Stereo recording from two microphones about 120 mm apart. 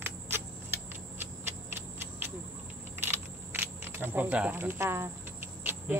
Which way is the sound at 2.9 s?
20° right (ahead or behind).